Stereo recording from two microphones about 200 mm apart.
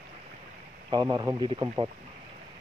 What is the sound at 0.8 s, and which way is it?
Speech, 20° right (ahead or behind).